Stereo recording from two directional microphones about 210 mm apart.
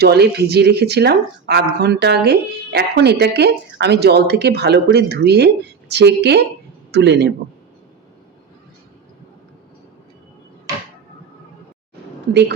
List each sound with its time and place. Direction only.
0.0 s speech: 50° right (ahead or behind)
12.3 s a woman's voice: 55° right (ahead or behind)